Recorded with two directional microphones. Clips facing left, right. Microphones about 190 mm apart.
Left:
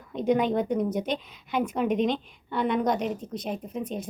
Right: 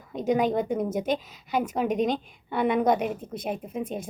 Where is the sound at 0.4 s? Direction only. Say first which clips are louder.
Even; 45° right (ahead or behind).